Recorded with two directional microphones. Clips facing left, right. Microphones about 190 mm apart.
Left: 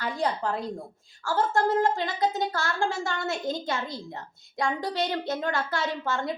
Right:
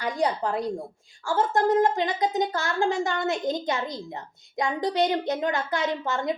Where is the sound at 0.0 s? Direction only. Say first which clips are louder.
Right 3 dB; 15° right (ahead or behind).